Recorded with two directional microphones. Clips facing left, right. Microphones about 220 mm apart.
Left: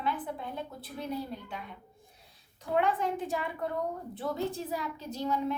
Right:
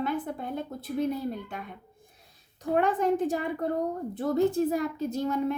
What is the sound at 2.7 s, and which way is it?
A woman's voice, 45° right (ahead or behind).